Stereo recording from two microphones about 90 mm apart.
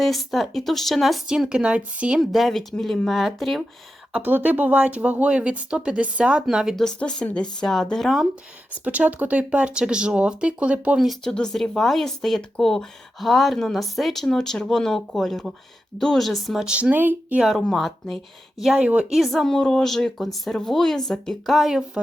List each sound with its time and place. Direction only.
0.0 s speech: centre (ahead or behind)
2.3 s speech: centre (ahead or behind)
4.1 s speech: 20° right (ahead or behind)
6.7 s speech: 10° left (ahead or behind)
8.8 s speech: 15° right (ahead or behind)
11.2 s speech: 10° left (ahead or behind)
16.6 s speech: 10° right (ahead or behind)
16.9 s a sound: 20° right (ahead or behind)
17.5 s speech: centre (ahead or behind)